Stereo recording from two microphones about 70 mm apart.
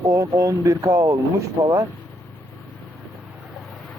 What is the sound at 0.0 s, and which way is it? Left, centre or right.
Speech, right.